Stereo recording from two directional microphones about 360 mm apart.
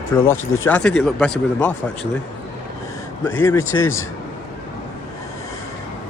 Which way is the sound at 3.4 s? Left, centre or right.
Centre.